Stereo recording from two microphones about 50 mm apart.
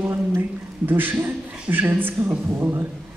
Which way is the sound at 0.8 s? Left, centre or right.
Right.